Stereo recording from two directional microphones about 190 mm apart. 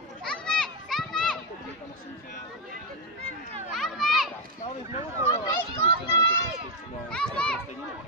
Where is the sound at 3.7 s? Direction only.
Centre (ahead or behind).